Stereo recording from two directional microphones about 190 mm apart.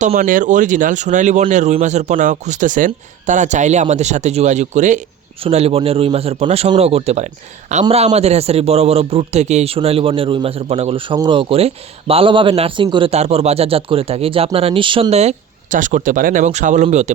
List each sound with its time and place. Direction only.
0.0 s a man's voice: 40° right (ahead or behind)